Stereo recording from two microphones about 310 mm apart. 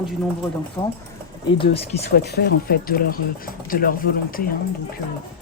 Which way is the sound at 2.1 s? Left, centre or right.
Left.